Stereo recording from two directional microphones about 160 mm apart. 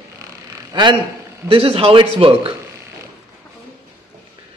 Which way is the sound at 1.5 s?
35° right (ahead or behind).